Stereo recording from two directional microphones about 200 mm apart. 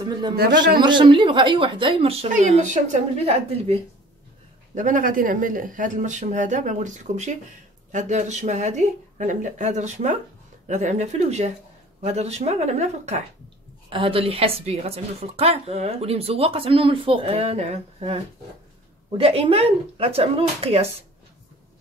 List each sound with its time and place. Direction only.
0.0 s a man's voice: 20° right (ahead or behind)